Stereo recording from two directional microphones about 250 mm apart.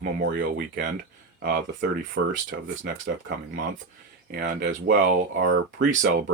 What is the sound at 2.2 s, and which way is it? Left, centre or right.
Speech, right.